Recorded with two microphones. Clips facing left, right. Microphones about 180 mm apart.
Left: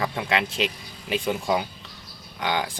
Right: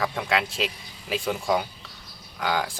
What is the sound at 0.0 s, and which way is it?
Speech, 5° left (ahead or behind).